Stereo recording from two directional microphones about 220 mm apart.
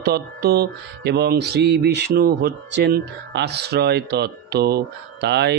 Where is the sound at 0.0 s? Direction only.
45° right (ahead or behind).